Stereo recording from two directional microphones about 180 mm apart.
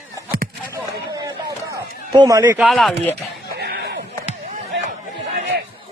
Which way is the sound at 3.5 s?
65° right (ahead or behind).